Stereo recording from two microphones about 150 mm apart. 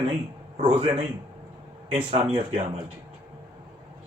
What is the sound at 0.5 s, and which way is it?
Speech, 40° right (ahead or behind).